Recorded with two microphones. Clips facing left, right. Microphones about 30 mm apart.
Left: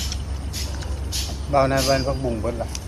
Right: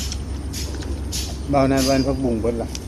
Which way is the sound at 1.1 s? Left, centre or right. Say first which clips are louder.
Right 1 dB; centre.